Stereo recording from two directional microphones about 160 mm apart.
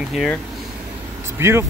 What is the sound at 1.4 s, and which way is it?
Speech, 15° right (ahead or behind).